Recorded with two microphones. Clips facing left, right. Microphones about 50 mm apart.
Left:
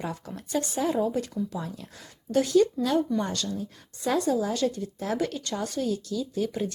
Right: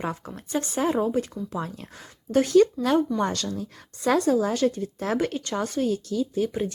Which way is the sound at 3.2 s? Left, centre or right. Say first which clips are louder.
Right 4 dB; right.